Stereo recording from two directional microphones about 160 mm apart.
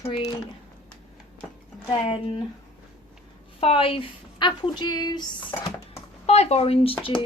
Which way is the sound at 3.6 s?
35° left (ahead or behind).